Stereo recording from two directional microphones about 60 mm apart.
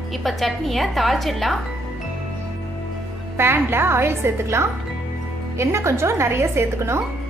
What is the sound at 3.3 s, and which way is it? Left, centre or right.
A woman's voice, right.